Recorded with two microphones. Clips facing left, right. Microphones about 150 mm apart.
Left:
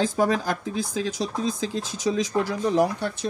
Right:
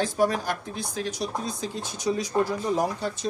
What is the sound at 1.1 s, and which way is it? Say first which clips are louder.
Speech: left 4 dB; 90° left.